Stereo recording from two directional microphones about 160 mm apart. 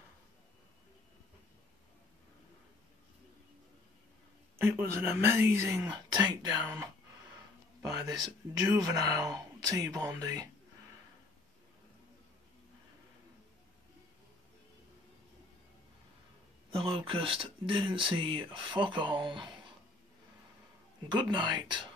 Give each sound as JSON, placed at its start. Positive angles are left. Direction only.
{"t": 4.6, "sound": "speech", "side_deg": -15}
{"t": 8.7, "sound": "speech", "side_deg": -25}
{"t": 16.7, "sound": "speech", "side_deg": -35}
{"t": 21.1, "sound": "speech", "side_deg": -30}